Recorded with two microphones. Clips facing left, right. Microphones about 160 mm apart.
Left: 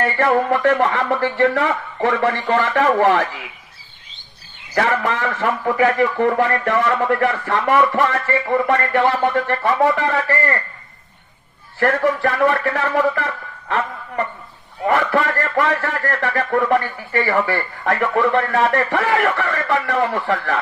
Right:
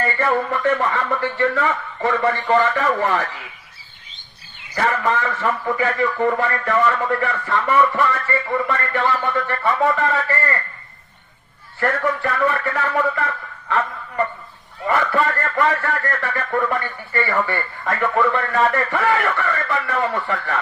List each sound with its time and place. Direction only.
0.0 s speech: 85° left
4.7 s a man's voice: 85° left
11.8 s speech: 70° left (ahead or behind)
14.9 s speech: 75° left (ahead or behind)